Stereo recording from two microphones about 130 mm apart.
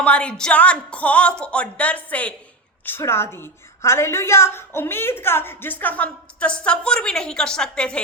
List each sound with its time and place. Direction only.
0.0 s a woman's voice: 10° left (ahead or behind)